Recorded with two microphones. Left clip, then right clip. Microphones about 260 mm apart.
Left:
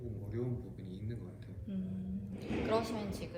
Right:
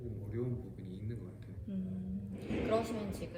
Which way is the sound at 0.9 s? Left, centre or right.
Centre.